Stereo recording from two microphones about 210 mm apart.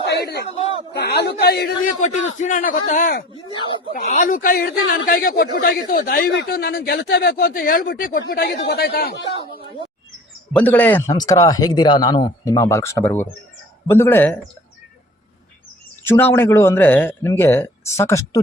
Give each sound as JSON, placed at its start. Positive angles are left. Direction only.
{"t": 0.0, "sound": "a sound", "side_deg": 50}
{"t": 0.9, "sound": "speech", "side_deg": 50}
{"t": 2.0, "sound": "a man's voice", "side_deg": 35}
{"t": 10.5, "sound": "speech", "side_deg": 10}
{"t": 16.0, "sound": "speech", "side_deg": 10}